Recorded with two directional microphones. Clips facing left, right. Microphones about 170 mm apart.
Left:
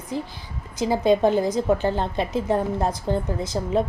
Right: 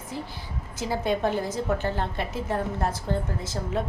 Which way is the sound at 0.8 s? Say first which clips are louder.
Left 7 dB; 15° left (ahead or behind).